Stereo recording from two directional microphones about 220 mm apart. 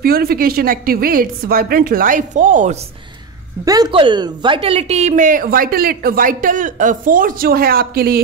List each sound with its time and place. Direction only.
0.0 s speech: 45° right (ahead or behind)
3.6 s speech: 15° right (ahead or behind); by 8.2 s 45° right (ahead or behind)